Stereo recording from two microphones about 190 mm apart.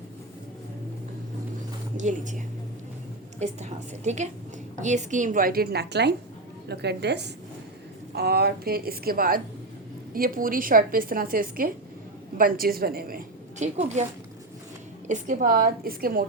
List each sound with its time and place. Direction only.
2.0 s a woman's voice: 40° right (ahead or behind)
13.7 s a woman's voice: 35° right (ahead or behind)
15.0 s a woman's voice: 40° right (ahead or behind)